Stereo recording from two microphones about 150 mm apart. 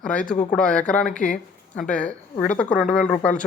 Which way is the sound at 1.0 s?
60° left (ahead or behind).